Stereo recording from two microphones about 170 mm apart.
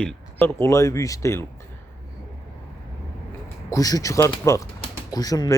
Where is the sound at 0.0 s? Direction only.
10° left (ahead or behind).